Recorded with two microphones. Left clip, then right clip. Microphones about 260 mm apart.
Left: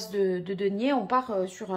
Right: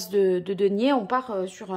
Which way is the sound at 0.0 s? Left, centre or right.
Right.